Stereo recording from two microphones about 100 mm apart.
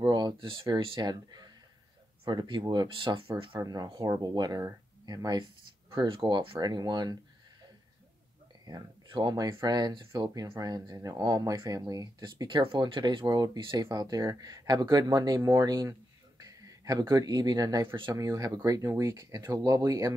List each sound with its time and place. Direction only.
0.0 s speech: 45° right (ahead or behind)
2.9 s speech: 60° right (ahead or behind)
3.7 s speech: 40° right (ahead or behind)
5.4 s speech: 60° right (ahead or behind)
6.6 s speech: 45° right (ahead or behind)
8.7 s speech: 50° right (ahead or behind)
9.2 s speech: 35° right (ahead or behind)
13.9 s speech: 40° right (ahead or behind)
15.9 s a sound: 35° right (ahead or behind)
18.1 s speech: 35° right (ahead or behind)